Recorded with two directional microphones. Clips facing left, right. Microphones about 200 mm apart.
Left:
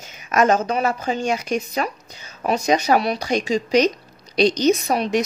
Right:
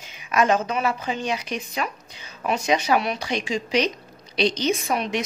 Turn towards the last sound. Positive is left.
turn(degrees=35)  # may be behind; listen again after turning